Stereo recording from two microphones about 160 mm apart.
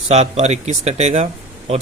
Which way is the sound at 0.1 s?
45° right (ahead or behind).